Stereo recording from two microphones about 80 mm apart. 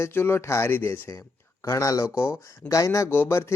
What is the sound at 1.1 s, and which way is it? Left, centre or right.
Speech, left.